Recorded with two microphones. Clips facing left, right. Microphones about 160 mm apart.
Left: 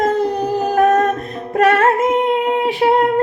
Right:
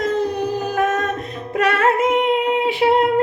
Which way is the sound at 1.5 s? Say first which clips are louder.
Left 4 dB; 45° left (ahead or behind).